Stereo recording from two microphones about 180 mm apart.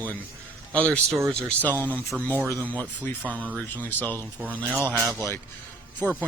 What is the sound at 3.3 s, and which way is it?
Speech, 10° right (ahead or behind).